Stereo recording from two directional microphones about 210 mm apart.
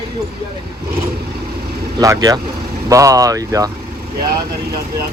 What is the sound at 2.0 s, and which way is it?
Speech, 15° right (ahead or behind).